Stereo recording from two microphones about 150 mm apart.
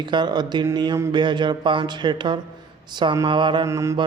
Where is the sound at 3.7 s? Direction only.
20° right (ahead or behind).